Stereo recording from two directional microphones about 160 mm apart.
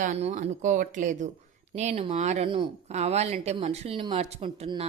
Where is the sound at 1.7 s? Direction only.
40° right (ahead or behind).